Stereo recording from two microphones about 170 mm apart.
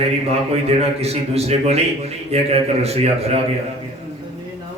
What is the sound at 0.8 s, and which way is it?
A man's voice, 35° right (ahead or behind).